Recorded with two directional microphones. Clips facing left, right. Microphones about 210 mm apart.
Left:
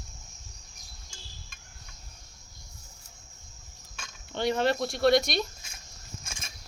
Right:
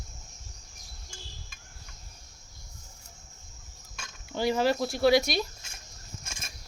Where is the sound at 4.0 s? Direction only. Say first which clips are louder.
Right 1 dB; 5° right (ahead or behind).